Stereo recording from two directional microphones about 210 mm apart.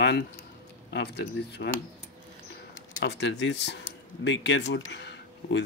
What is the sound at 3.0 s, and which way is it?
Speech, 55° left (ahead or behind).